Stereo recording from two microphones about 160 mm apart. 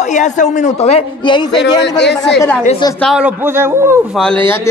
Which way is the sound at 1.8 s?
90° left.